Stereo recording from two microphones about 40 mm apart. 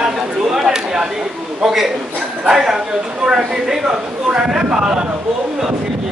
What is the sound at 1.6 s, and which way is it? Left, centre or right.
A man's voice, centre.